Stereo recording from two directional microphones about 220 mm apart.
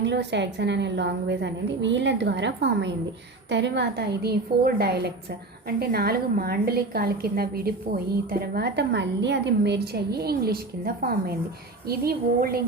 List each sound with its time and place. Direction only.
0.0 s a woman's voice: 50° right (ahead or behind)